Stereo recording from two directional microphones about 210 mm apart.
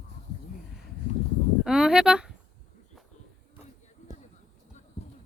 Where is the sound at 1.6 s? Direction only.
5° right (ahead or behind).